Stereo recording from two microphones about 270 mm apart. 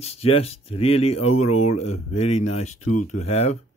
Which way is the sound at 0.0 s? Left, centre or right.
Left.